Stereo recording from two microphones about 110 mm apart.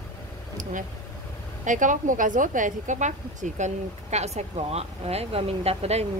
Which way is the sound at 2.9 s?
90° right.